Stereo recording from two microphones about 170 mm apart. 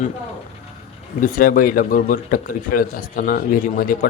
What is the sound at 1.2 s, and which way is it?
A man's voice, 50° left (ahead or behind).